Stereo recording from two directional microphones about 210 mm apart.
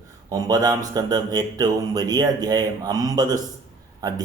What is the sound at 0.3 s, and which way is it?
Speech, 15° right (ahead or behind).